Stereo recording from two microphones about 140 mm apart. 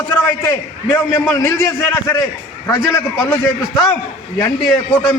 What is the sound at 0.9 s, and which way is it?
Speech, 10° left (ahead or behind).